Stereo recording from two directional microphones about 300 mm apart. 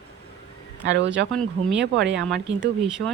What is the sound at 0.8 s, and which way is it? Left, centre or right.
Speech, right.